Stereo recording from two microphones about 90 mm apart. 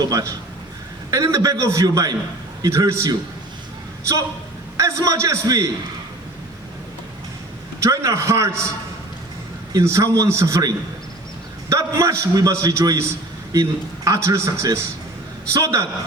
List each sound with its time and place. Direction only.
0.0 s a man's voice: 40° right (ahead or behind)
4.8 s a man's voice: 35° right (ahead or behind)
7.8 s a man's voice: 35° right (ahead or behind)
9.7 s a man's voice: 35° right (ahead or behind)